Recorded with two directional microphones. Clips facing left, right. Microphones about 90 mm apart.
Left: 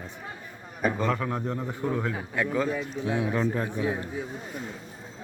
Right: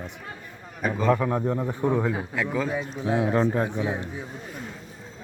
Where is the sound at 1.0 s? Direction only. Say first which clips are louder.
Right 5 dB; 20° right (ahead or behind).